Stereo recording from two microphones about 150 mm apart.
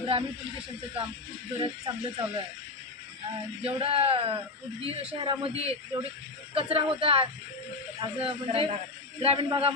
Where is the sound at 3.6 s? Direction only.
40° right (ahead or behind).